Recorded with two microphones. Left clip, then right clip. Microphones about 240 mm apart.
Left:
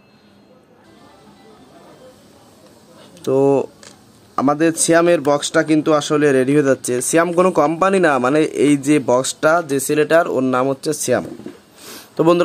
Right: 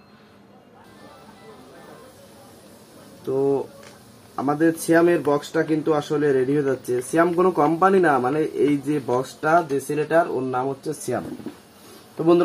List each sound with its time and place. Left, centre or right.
3.3 s speech: left